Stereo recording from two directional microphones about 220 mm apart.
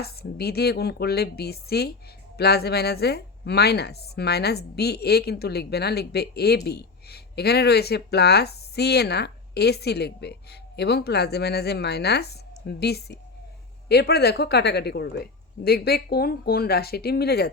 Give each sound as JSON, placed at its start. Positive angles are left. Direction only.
{"t": 0.0, "sound": "a woman's voice", "side_deg": 45}